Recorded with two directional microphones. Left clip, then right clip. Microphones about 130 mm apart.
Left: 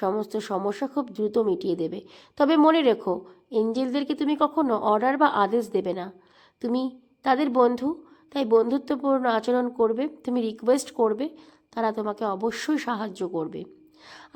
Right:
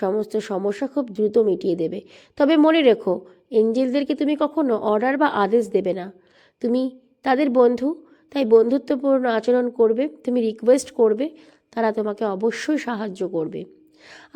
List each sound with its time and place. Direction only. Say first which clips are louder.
0.0 s a woman's voice: right 4 dB; 25° right (ahead or behind)